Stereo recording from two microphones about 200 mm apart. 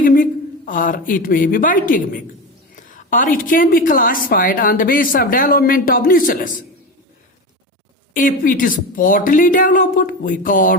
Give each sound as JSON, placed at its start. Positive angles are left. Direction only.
{"t": 0.0, "sound": "a woman's voice", "side_deg": 45}
{"t": 8.1, "sound": "a woman's voice", "side_deg": 45}